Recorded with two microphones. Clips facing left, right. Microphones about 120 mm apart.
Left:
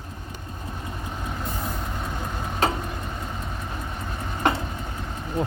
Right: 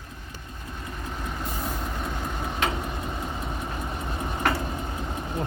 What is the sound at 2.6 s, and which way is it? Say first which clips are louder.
Vehicle: left 4 dB; 35° left (ahead or behind).